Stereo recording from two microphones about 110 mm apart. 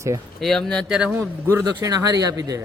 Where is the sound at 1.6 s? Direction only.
35° right (ahead or behind).